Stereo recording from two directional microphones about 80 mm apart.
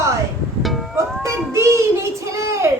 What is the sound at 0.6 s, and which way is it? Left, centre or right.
Music, centre.